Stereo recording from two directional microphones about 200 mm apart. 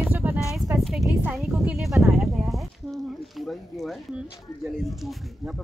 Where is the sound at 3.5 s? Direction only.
Centre (ahead or behind).